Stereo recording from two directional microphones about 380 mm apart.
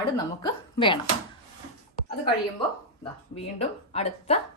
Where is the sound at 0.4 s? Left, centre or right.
Centre.